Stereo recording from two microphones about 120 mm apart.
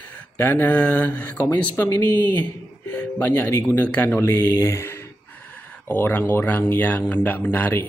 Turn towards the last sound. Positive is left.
turn(degrees=15)  # may be behind; listen again after turning